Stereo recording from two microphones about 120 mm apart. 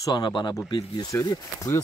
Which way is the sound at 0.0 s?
35° left (ahead or behind).